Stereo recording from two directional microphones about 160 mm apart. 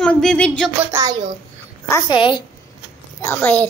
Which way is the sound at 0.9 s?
25° right (ahead or behind).